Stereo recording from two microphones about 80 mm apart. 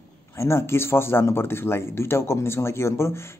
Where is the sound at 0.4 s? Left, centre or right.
Left.